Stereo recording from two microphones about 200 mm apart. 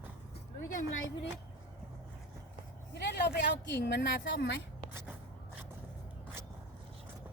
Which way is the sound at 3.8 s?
55° left (ahead or behind).